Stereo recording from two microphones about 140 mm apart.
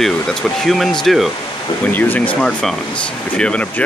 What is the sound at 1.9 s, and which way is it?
Speech, 10° left (ahead or behind).